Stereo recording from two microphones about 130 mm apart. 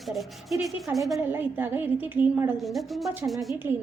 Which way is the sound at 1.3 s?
15° right (ahead or behind).